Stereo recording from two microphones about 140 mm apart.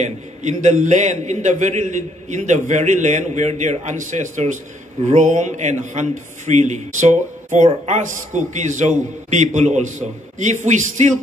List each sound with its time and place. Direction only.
0.0 s a man's voice: 55° right (ahead or behind)